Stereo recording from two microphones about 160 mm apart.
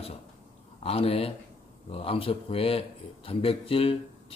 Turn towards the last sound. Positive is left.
turn(degrees=35)  # may be behind; listen again after turning